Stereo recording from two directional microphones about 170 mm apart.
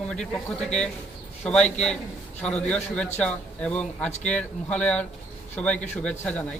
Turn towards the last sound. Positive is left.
turn(degrees=10)  # may be behind; listen again after turning